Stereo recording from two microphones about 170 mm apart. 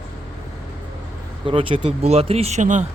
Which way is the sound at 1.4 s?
30° right (ahead or behind).